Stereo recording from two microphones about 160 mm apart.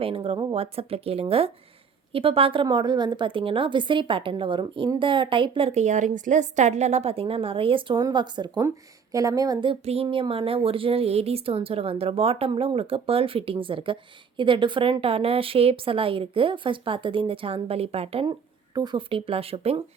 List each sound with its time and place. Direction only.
0.0 s speech: 35° right (ahead or behind)